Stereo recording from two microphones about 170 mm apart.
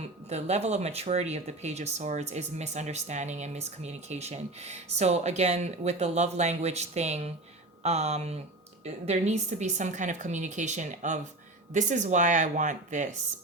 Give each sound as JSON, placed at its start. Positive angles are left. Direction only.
{"t": 0.0, "sound": "a woman's voice", "side_deg": -40}